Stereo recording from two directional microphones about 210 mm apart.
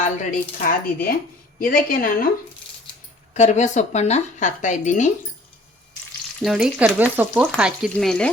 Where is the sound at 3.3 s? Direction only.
35° left (ahead or behind).